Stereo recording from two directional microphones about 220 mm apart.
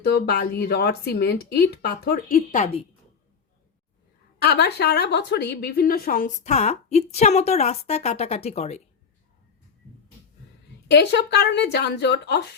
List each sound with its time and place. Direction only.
0.0 s speech: 45° left (ahead or behind); by 2.8 s 30° left (ahead or behind)
4.4 s a woman's voice: 50° left (ahead or behind); by 8.8 s 30° left (ahead or behind)
10.8 s speech: 50° left (ahead or behind)